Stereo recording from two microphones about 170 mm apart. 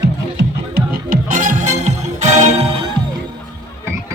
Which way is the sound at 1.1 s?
50° right (ahead or behind).